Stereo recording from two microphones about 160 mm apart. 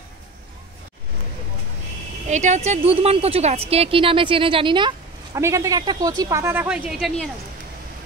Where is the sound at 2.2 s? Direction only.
50° right (ahead or behind); by 4.9 s 30° right (ahead or behind).